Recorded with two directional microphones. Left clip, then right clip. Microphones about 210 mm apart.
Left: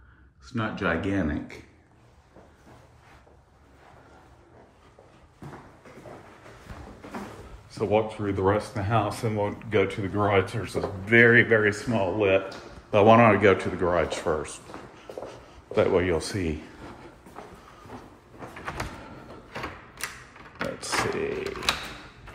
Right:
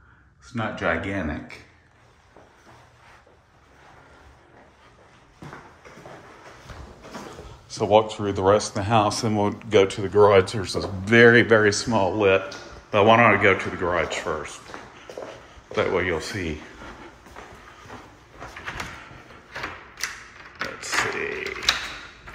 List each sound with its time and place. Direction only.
0.6 s speech: 5° right (ahead or behind)
7.7 s speech: 20° right (ahead or behind)
12.9 s speech: centre (ahead or behind)
14.7 s walk: centre (ahead or behind)
15.7 s speech: 5° left (ahead or behind)
20.8 s a sound: 10° left (ahead or behind)